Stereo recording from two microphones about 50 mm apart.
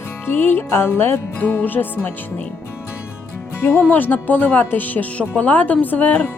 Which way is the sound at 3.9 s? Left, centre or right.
Left.